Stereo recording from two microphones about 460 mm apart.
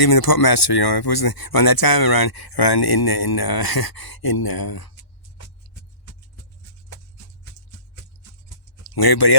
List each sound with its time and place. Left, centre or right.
0.0 s speech: left
9.0 s speech: left